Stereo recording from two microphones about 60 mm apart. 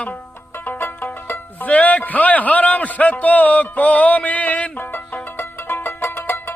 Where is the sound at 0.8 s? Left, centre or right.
Left.